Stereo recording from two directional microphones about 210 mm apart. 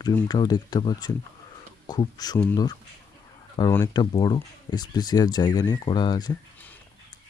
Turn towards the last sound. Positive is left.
turn(degrees=20)  # may be behind; listen again after turning